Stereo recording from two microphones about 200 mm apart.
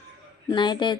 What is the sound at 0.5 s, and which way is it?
Speech, 20° left (ahead or behind).